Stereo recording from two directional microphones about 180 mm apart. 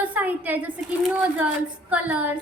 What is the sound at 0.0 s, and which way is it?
A woman's voice, 10° right (ahead or behind).